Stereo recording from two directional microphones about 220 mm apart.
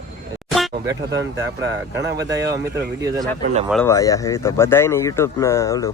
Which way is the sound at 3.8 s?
15° left (ahead or behind).